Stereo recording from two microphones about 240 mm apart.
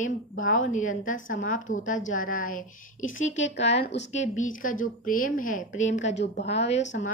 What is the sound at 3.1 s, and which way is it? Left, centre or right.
A woman's voice, left.